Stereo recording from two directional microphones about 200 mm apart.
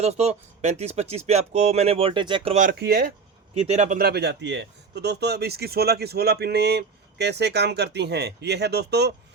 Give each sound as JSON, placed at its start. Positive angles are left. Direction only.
{"t": 0.0, "sound": "speech", "side_deg": -30}
{"t": 3.7, "sound": "a man's voice", "side_deg": -35}